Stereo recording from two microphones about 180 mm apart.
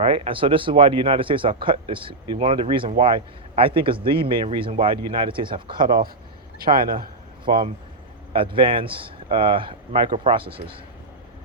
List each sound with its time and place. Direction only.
0.0 s speech: 30° right (ahead or behind)
6.6 s a man's voice: 55° right (ahead or behind)
7.4 s speech: 25° right (ahead or behind)